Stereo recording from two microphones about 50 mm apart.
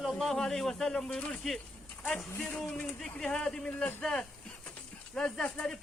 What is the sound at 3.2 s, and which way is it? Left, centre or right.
A man's voice, centre.